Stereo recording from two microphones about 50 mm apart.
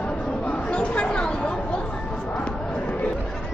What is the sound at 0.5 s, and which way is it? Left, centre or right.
Chatter, left.